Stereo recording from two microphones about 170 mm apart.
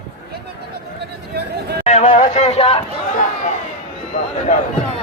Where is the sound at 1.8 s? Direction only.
40° left (ahead or behind).